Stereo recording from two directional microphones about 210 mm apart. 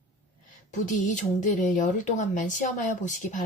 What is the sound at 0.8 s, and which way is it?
Speech, 35° left (ahead or behind).